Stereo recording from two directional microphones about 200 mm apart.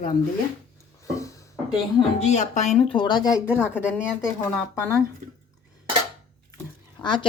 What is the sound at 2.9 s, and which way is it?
Speech, 20° left (ahead or behind).